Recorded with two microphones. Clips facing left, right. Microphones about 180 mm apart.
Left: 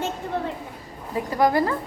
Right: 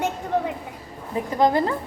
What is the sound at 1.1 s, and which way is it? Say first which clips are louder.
Speech: right 1 dB; 20° right (ahead or behind).